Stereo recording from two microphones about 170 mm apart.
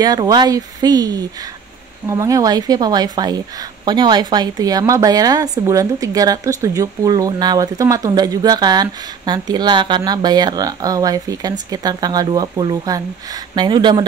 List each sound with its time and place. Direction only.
0.0 s a woman's voice: 25° right (ahead or behind)